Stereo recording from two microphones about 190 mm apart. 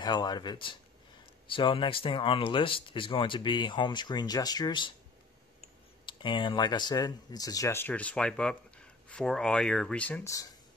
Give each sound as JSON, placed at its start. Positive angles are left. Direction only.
{"t": 0.0, "sound": "speech", "side_deg": 20}
{"t": 6.0, "sound": "speech", "side_deg": 25}